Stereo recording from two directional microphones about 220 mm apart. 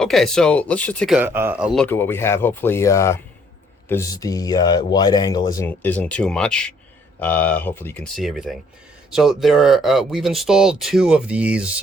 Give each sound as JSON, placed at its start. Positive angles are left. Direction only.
{"t": 0.0, "sound": "speech", "side_deg": 0}